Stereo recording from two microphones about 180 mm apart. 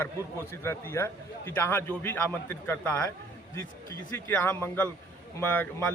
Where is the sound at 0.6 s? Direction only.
15° left (ahead or behind).